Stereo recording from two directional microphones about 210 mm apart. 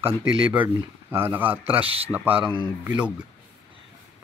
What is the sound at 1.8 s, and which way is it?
Speech, 25° right (ahead or behind).